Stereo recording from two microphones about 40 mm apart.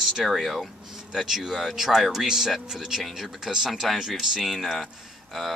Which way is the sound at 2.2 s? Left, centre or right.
Centre.